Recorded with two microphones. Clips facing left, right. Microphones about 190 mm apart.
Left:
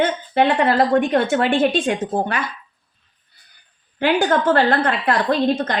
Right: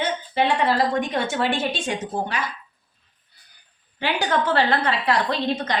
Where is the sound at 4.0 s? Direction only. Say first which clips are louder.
Left 6 dB; 50° left (ahead or behind).